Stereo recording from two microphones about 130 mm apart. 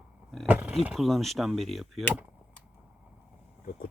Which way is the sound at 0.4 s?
15° right (ahead or behind).